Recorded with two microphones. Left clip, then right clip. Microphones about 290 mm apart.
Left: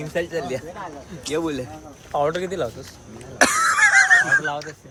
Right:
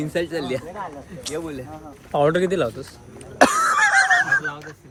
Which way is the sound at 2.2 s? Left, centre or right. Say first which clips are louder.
Right 5 dB; right.